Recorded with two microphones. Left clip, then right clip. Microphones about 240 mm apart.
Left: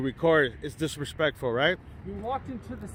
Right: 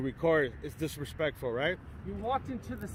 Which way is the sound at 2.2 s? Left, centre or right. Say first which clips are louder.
Even; centre.